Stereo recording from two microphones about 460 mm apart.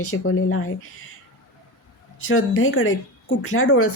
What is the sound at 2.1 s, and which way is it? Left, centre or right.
A woman's voice, left.